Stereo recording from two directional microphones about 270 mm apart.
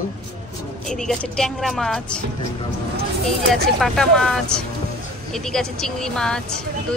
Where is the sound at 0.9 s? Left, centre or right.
Centre.